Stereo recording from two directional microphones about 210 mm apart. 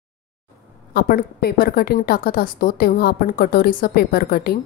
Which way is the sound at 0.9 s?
45° left (ahead or behind).